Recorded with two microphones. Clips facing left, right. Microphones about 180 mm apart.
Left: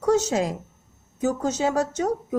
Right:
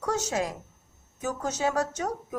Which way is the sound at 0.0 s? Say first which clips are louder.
Left 7 dB; 25° left (ahead or behind).